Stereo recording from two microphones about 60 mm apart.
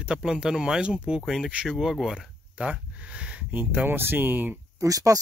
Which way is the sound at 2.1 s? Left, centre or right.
Centre.